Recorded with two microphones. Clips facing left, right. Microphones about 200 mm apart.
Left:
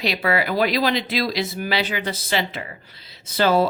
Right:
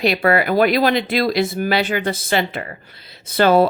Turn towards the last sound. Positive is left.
turn(degrees=-60)  # may be behind; listen again after turning